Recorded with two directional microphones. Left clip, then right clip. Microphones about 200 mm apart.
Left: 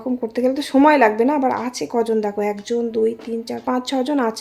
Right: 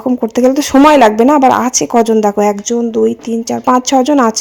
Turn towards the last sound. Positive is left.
turn(degrees=-35)  # may be behind; listen again after turning